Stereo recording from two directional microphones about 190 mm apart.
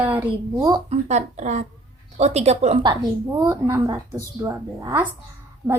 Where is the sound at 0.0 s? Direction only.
10° right (ahead or behind).